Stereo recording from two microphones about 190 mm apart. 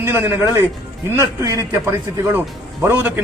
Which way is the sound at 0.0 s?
10° right (ahead or behind).